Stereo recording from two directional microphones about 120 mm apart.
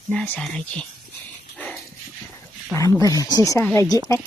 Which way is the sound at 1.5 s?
10° left (ahead or behind).